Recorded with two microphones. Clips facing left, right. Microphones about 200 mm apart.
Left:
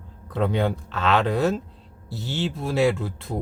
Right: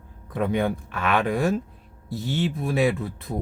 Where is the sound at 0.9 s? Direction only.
15° right (ahead or behind).